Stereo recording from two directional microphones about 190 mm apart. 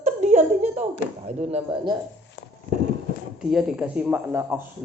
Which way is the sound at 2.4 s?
60° left (ahead or behind).